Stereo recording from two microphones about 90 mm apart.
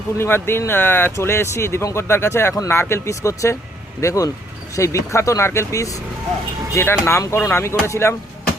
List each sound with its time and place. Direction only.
0.2 s speech: 25° left (ahead or behind)